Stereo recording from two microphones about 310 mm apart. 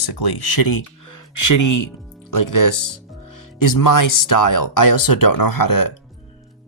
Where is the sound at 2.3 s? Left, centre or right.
Left.